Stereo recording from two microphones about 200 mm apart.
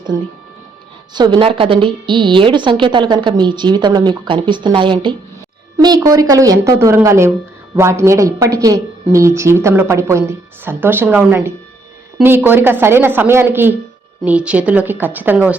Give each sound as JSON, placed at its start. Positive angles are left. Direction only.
{"t": 1.1, "sound": "speech", "side_deg": -20}